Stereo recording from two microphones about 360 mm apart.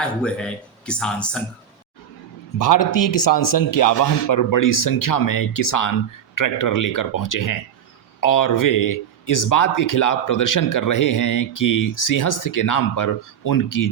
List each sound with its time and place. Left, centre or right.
0.0 s speech: centre
2.6 s a man's voice: left